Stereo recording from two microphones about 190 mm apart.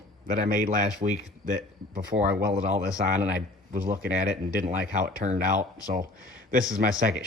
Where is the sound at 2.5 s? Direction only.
40° right (ahead or behind).